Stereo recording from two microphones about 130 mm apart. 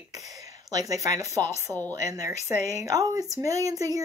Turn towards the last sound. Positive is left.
turn(degrees=-25)  # may be behind; listen again after turning